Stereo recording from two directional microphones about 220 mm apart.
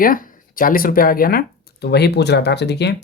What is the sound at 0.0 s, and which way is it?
Speech, 40° left (ahead or behind).